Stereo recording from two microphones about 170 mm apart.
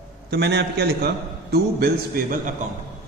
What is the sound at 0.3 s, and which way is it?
A man's voice, 80° right.